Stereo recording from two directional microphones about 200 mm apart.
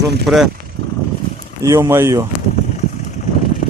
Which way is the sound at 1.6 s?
15° right (ahead or behind).